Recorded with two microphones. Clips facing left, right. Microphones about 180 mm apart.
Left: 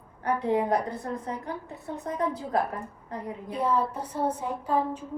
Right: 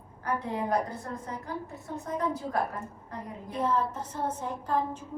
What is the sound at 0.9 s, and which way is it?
Speech, 60° left (ahead or behind).